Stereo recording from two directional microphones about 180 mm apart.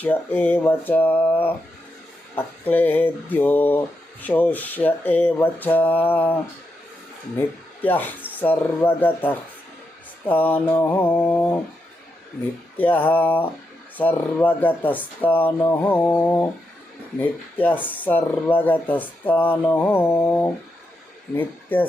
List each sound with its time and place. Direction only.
0.0 s speech: 10° left (ahead or behind)
12.7 s speech: 10° left (ahead or behind)